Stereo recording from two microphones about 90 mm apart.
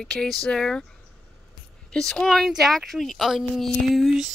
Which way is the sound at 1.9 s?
5° left (ahead or behind).